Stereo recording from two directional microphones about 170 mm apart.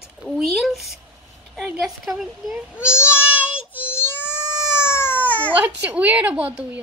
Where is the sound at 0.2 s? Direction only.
Centre (ahead or behind).